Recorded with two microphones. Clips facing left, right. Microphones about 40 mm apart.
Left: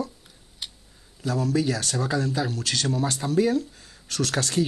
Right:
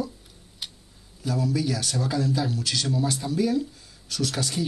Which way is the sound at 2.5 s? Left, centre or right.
Left.